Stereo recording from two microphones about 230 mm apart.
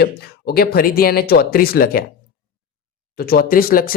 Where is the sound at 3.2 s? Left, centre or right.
Left.